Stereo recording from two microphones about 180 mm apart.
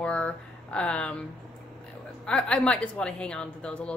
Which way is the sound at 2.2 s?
5° left (ahead or behind).